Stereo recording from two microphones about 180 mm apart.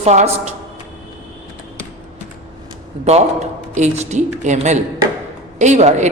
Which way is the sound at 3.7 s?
40° right (ahead or behind).